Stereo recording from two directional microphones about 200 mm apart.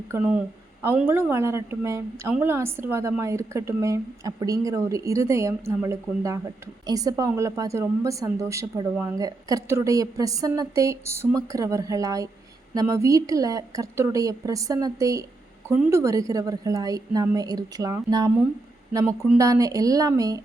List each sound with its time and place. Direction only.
0.1 s a woman's voice: 10° right (ahead or behind)